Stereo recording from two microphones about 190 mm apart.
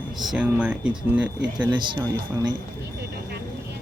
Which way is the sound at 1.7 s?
25° right (ahead or behind).